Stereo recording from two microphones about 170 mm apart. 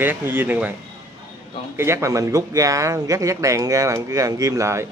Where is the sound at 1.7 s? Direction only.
15° right (ahead or behind).